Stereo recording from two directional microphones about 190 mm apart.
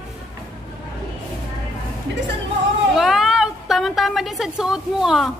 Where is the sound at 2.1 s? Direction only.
70° right (ahead or behind).